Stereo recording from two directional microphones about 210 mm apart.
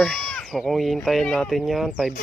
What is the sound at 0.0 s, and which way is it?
Speech, centre (ahead or behind).